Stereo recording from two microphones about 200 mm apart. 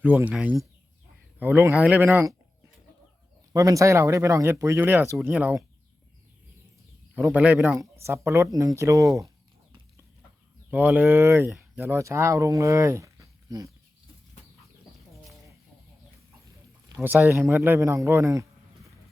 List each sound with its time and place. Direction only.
0.0 s speech: 10° right (ahead or behind)
3.5 s speech: 15° right (ahead or behind)
7.2 s speech: 10° right (ahead or behind)
10.7 s speech: 10° right (ahead or behind)
17.0 s speech: 10° right (ahead or behind)